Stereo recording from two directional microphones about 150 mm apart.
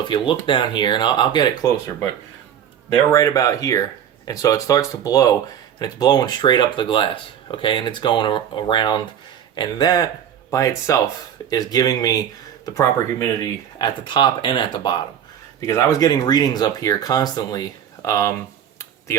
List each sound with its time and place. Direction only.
0.1 s speech: 35° left (ahead or behind)
15.6 s speech: 20° left (ahead or behind)